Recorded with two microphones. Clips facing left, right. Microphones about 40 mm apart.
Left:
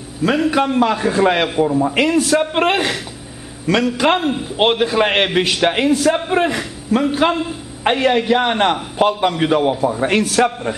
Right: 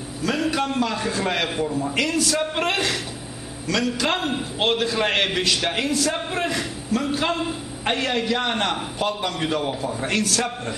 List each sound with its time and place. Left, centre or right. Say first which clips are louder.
0.4 s a man's voice: left 7 dB; centre
4.2 s a man's voice: left 5 dB; centre
4.6 s a man's voice: left 7 dB; left